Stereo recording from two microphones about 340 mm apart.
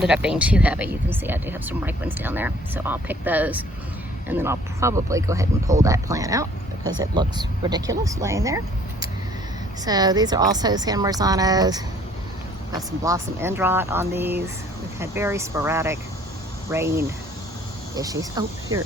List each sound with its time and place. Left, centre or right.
0.0 s speech: centre
17.9 s speech: centre